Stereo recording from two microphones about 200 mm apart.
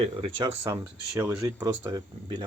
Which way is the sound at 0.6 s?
10° right (ahead or behind).